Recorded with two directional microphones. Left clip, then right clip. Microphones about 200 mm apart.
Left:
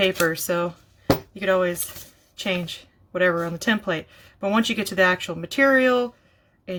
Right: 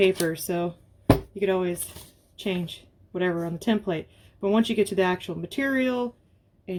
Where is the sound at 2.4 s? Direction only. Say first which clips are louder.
Left 4 dB; 45° left (ahead or behind).